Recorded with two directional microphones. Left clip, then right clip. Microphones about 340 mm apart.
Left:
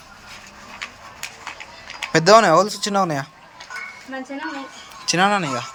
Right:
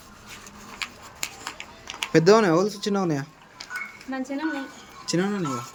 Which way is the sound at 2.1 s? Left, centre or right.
Centre.